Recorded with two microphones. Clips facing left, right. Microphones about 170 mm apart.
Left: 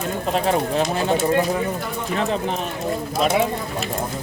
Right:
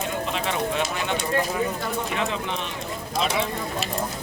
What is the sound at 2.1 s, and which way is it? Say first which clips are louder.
Speech: left 5 dB; 40° left (ahead or behind).